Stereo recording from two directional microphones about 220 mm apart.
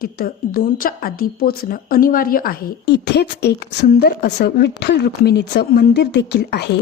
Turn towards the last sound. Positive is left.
turn(degrees=45)  # may be behind; listen again after turning